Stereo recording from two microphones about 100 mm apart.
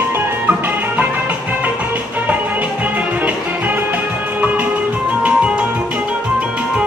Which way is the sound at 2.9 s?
15° right (ahead or behind).